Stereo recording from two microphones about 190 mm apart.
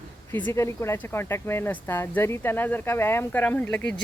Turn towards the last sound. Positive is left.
turn(degrees=10)  # may be behind; listen again after turning